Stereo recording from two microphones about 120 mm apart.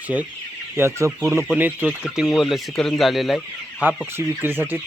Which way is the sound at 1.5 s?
10° right (ahead or behind).